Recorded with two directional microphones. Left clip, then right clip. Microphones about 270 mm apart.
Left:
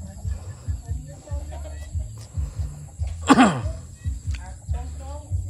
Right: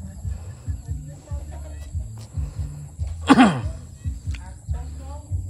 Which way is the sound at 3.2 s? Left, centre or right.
Centre.